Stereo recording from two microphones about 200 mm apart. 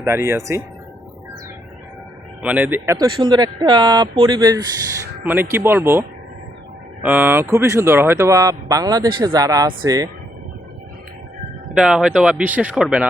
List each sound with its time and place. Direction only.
0.0 s speech: 10° right (ahead or behind)
2.4 s speech: 5° right (ahead or behind)
11.7 s speech: 5° right (ahead or behind)